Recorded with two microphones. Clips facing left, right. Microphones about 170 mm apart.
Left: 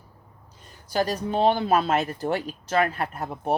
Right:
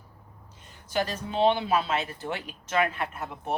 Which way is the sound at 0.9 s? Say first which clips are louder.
Left 4 dB; 40° left (ahead or behind).